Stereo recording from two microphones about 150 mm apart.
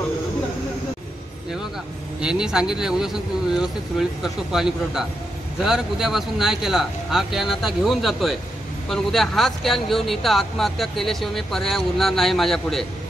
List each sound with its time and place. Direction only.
2.1 s speech: 5° right (ahead or behind)